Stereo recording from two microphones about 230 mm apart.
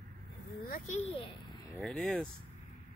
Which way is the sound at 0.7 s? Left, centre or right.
Left.